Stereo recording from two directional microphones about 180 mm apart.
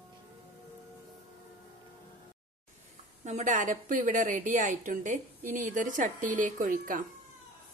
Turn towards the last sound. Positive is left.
turn(degrees=-50)  # may be behind; listen again after turning